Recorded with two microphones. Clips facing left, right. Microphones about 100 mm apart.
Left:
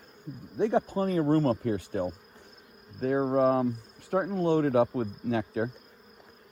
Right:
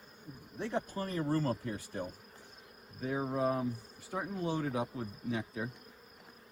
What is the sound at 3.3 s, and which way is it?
Speech, 60° left (ahead or behind).